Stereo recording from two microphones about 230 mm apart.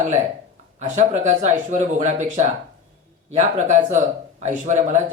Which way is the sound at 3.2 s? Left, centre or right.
Right.